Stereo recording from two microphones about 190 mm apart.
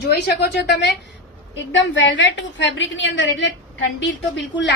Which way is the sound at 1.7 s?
75° left (ahead or behind).